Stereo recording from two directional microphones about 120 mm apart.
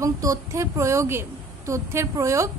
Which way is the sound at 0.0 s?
25° right (ahead or behind).